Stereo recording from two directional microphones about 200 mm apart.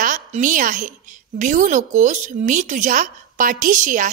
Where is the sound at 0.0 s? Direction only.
40° right (ahead or behind).